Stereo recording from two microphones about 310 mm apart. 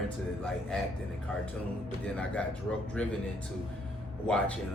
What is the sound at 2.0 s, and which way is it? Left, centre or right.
A man's voice, centre.